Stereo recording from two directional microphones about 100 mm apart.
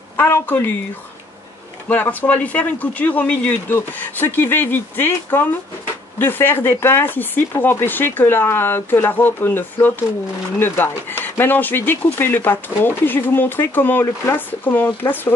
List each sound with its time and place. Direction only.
0.2 s speech: 25° left (ahead or behind)
1.9 s speech: 15° left (ahead or behind)